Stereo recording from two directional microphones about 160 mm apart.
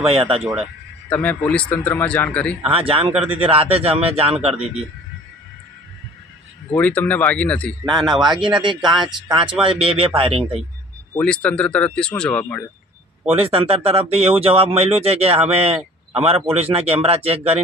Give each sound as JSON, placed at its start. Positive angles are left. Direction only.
{"t": 0.0, "sound": "a man's voice", "side_deg": -40}
{"t": 0.4, "sound": "speech", "side_deg": 0}
{"t": 1.1, "sound": "speech", "side_deg": 10}
{"t": 2.7, "sound": "a man's voice", "side_deg": -35}
{"t": 6.7, "sound": "speech", "side_deg": 10}
{"t": 8.4, "sound": "a man's voice", "side_deg": -30}
{"t": 11.1, "sound": "speech", "side_deg": 10}
{"t": 13.2, "sound": "a man's voice", "side_deg": -40}